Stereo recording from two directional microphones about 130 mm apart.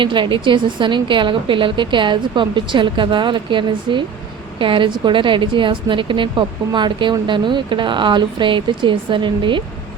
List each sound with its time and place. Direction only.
0.0 s a woman's voice: 40° right (ahead or behind)